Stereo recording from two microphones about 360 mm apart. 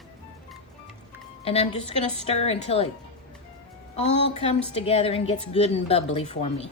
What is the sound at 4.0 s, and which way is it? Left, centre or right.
A woman's voice, centre.